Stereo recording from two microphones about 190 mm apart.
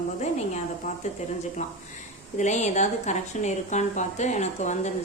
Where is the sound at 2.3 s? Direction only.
40° left (ahead or behind).